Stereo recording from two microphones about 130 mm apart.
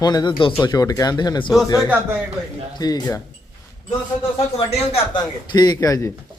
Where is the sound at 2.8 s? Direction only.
30° left (ahead or behind).